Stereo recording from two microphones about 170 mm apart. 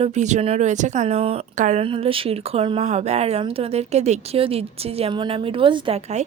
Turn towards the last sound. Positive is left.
turn(degrees=-40)  # may be behind; listen again after turning